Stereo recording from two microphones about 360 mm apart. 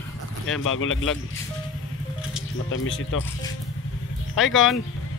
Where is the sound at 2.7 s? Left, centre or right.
Left.